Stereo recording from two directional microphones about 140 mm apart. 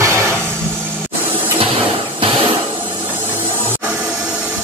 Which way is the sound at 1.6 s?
40° right (ahead or behind).